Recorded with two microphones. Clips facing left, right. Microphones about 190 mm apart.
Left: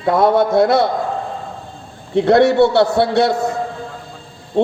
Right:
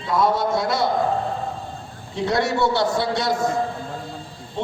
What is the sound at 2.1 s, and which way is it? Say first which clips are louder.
A man's voice: left 10 dB; 60° left (ahead or behind).